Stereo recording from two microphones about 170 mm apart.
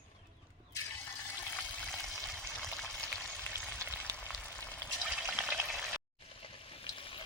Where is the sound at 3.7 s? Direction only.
15° right (ahead or behind).